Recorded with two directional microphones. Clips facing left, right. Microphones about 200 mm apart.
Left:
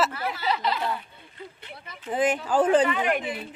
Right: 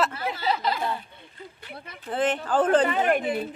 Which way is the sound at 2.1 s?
10° left (ahead or behind).